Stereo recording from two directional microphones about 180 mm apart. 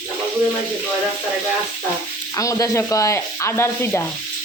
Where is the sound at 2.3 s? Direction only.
20° left (ahead or behind).